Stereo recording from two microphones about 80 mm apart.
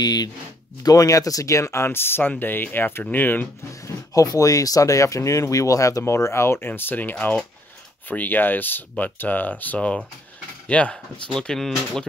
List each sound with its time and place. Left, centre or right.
0.0 s speech: left
0.8 s speech: left
3.8 s speech: left; by 12.1 s centre